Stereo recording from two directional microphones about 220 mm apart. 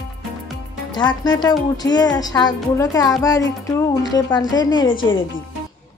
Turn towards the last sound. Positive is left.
turn(degrees=25)  # may be behind; listen again after turning